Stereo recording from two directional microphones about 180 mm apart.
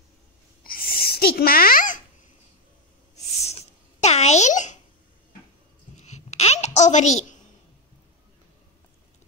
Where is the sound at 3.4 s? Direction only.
35° left (ahead or behind).